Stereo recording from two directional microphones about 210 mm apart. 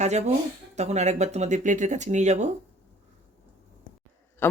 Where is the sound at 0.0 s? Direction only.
30° right (ahead or behind).